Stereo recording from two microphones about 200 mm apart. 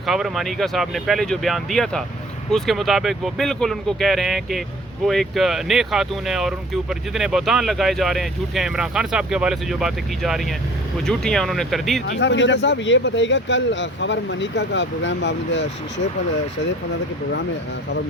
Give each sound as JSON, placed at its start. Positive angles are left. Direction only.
{"t": 0.0, "sound": "speech", "side_deg": 0}
{"t": 12.2, "sound": "speech", "side_deg": 60}